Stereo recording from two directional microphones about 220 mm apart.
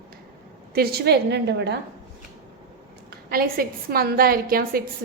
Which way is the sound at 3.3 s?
45° right (ahead or behind).